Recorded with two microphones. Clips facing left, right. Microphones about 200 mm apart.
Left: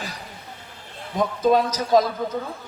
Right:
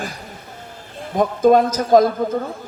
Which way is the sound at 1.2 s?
50° right (ahead or behind).